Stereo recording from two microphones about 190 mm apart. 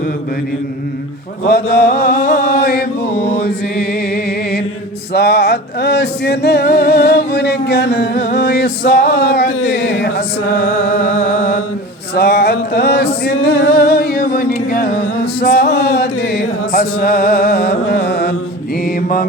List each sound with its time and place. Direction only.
1.5 s chant: 55° left (ahead or behind)
3.4 s music: 55° left (ahead or behind)
10.7 s music: 80° left
12.1 s male singing: 55° left (ahead or behind)
15.2 s chant: 55° left (ahead or behind)